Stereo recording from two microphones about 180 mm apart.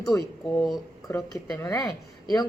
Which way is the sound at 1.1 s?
20° left (ahead or behind).